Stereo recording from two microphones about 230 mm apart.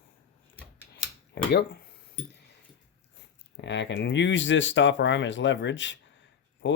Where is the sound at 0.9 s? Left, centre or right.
Left.